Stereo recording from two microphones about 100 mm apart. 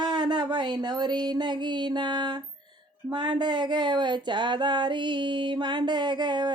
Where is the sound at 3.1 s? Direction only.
45° right (ahead or behind).